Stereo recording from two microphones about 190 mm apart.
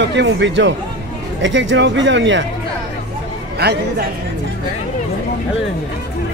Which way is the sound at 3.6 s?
60° right (ahead or behind).